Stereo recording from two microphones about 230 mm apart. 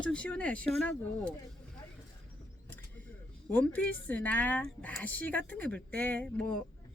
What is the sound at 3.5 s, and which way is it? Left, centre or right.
A woman's voice, centre.